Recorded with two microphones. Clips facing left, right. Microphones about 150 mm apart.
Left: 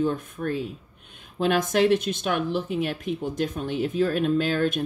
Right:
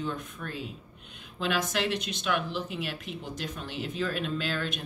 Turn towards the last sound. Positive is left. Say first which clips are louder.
# left 9 dB
turn(degrees=50)  # may be behind; listen again after turning